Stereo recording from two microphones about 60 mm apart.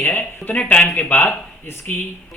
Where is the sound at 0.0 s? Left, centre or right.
Left.